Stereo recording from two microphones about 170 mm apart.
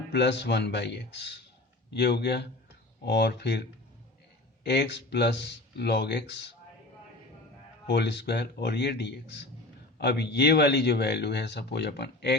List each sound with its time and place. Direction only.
0.1 s speech: 90° left
4.6 s speech: 80° left
7.9 s speech: 85° left
10.0 s speech: 80° left